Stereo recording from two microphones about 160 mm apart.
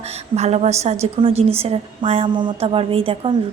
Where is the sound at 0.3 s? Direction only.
45° right (ahead or behind).